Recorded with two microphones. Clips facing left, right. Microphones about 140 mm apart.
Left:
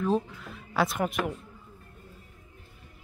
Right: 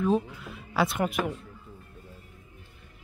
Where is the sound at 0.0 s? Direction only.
5° right (ahead or behind).